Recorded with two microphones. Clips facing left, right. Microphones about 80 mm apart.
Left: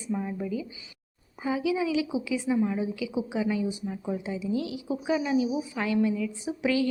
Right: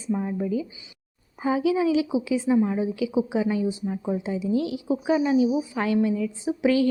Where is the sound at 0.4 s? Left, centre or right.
Right.